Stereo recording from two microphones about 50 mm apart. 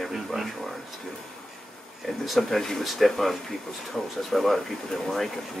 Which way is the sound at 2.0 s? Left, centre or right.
Centre.